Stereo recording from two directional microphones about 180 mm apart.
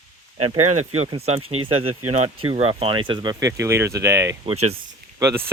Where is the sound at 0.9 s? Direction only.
35° right (ahead or behind); by 4.3 s 15° right (ahead or behind).